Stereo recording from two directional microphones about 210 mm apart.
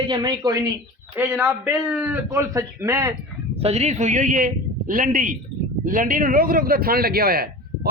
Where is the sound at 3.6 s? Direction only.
30° right (ahead or behind).